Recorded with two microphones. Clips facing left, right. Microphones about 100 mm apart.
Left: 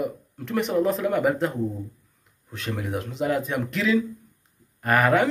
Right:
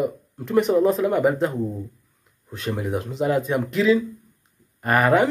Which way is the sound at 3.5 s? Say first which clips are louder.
Right 4 dB; 10° right (ahead or behind).